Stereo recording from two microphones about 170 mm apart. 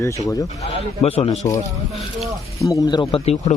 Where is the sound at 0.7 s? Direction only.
35° left (ahead or behind).